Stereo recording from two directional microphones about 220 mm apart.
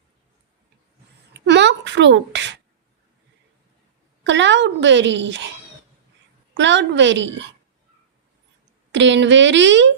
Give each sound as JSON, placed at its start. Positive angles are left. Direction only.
{"t": 1.3, "sound": "a child's voice", "side_deg": -50}
{"t": 4.2, "sound": "speech", "side_deg": -55}
{"t": 6.5, "sound": "speech", "side_deg": -55}
{"t": 8.9, "sound": "speech", "side_deg": -55}